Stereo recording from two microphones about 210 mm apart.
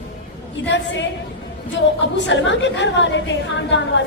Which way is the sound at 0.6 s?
60° left (ahead or behind).